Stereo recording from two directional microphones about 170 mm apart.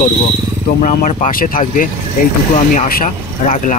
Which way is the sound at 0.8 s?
50° left (ahead or behind).